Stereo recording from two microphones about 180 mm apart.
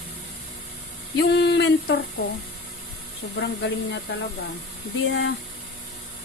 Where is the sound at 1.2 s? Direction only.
70° left (ahead or behind).